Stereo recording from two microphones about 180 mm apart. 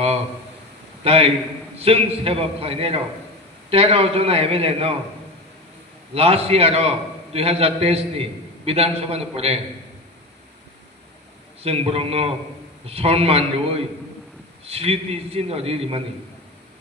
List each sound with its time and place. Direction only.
1.0 s a man's voice: 35° right (ahead or behind)
6.1 s a man's voice: 35° right (ahead or behind)
11.6 s a man's voice: 30° right (ahead or behind)